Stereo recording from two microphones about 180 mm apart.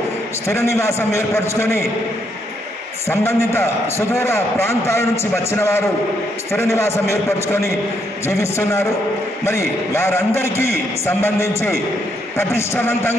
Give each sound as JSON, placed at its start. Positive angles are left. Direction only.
{"t": 0.5, "sound": "a man's voice", "side_deg": 15}
{"t": 3.1, "sound": "a man's voice", "side_deg": 15}